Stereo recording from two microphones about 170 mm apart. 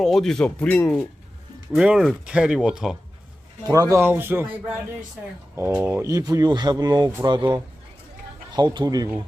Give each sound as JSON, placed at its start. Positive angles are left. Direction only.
{"t": 0.0, "sound": "speech", "side_deg": 0}
{"t": 1.7, "sound": "speech", "side_deg": -5}
{"t": 3.6, "sound": "speech", "side_deg": -20}